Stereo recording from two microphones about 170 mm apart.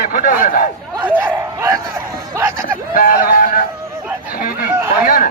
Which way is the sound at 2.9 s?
55° left (ahead or behind).